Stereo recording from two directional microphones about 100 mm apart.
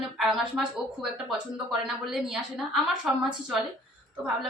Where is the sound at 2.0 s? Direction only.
5° right (ahead or behind).